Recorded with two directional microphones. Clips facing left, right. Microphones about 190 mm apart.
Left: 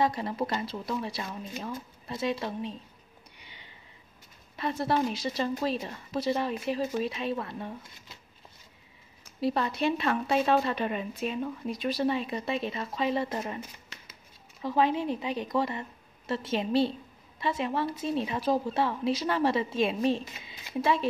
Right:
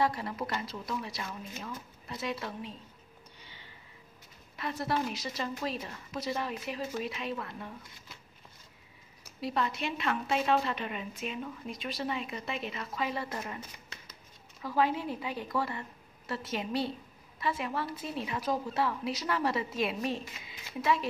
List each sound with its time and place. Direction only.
0.0 s a woman's voice: 25° left (ahead or behind)
3.3 s a sound: 15° left (ahead or behind)
4.6 s a woman's voice: 25° left (ahead or behind)
9.4 s a woman's voice: 35° left (ahead or behind)
14.6 s a woman's voice: 25° left (ahead or behind)